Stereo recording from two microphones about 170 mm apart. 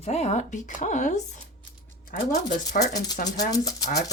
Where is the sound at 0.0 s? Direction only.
40° left (ahead or behind).